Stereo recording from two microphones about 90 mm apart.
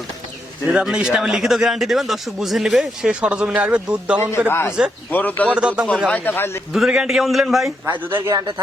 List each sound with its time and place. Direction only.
0.7 s speech: 10° right (ahead or behind)
4.4 s speech: 25° left (ahead or behind)
5.5 s speech: 10° right (ahead or behind)
6.1 s speech: 20° left (ahead or behind)
6.7 s a man's voice: 5° right (ahead or behind)
7.9 s speech: 25° right (ahead or behind)